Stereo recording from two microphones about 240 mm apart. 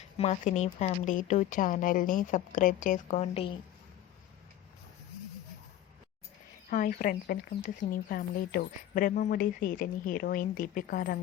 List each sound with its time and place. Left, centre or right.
0.2 s speech: left
6.7 s speech: left